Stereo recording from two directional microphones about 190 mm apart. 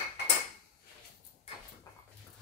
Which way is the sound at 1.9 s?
15° left (ahead or behind).